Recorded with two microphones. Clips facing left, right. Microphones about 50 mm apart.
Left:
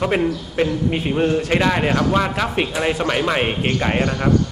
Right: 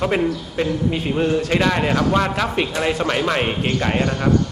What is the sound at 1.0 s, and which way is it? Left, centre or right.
A man's voice, centre.